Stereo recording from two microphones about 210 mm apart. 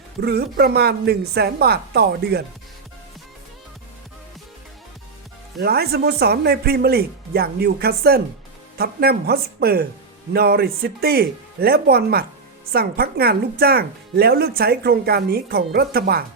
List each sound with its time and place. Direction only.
0.2 s speech: 50° right (ahead or behind)
5.5 s speech: 50° right (ahead or behind)